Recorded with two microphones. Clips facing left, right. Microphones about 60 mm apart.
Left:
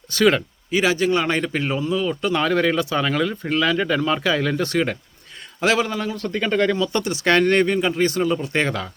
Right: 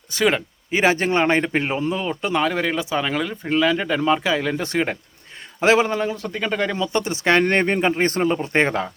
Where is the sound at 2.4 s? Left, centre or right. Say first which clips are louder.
Left 2 dB; centre.